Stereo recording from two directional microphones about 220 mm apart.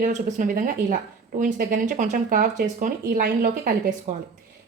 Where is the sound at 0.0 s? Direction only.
35° right (ahead or behind).